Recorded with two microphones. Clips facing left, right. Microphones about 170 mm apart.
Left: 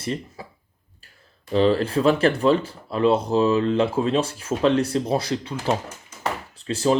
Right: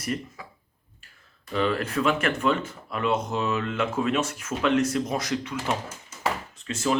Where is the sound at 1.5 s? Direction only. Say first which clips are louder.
Left 7 dB; 30° left (ahead or behind).